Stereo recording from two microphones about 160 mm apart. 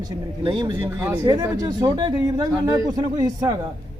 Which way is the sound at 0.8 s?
15° right (ahead or behind).